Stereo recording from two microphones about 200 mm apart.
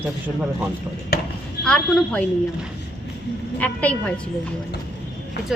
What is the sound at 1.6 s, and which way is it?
Speech, 5° left (ahead or behind).